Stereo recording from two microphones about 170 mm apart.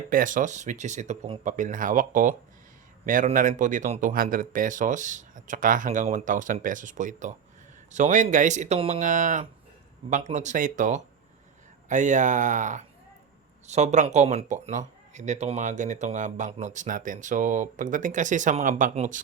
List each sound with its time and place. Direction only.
0.1 s speech: 50° right (ahead or behind)